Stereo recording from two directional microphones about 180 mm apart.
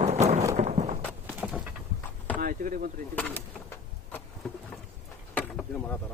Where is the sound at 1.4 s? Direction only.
5° right (ahead or behind).